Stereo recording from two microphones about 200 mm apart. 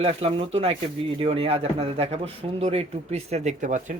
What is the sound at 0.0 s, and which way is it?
Speech, 30° right (ahead or behind).